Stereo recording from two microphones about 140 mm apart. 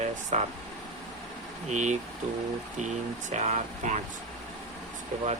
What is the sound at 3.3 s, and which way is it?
Speech, 55° right (ahead or behind).